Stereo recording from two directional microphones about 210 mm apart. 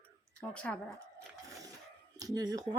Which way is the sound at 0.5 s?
5° left (ahead or behind).